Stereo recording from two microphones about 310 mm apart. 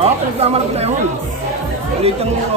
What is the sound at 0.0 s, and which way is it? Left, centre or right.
Speech, centre.